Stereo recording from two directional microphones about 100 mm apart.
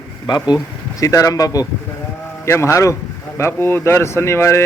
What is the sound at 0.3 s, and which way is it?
A man's voice, 45° left (ahead or behind).